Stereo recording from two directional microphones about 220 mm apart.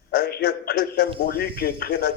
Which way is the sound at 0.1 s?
45° left (ahead or behind).